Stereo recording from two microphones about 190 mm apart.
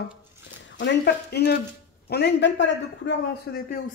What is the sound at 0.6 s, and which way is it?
A man's voice, 70° left (ahead or behind).